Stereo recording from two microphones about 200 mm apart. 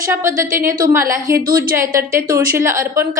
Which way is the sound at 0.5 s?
15° right (ahead or behind).